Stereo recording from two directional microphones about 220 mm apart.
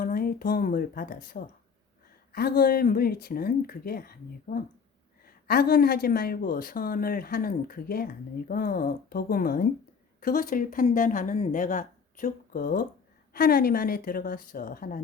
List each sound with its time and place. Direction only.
0.0 s a woman's voice: 40° left (ahead or behind)